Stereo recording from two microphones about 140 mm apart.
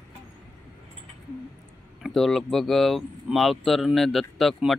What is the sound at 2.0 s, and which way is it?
Speech, centre (ahead or behind).